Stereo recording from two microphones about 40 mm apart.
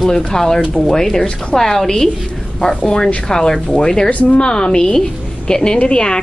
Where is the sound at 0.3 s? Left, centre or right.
Centre.